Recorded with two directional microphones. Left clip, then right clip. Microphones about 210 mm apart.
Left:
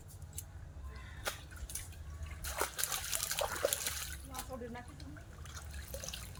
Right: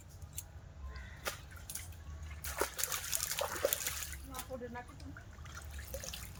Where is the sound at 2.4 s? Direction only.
10° left (ahead or behind).